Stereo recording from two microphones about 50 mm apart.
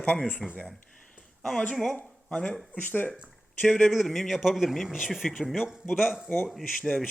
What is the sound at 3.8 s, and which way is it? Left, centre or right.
A man's voice, centre.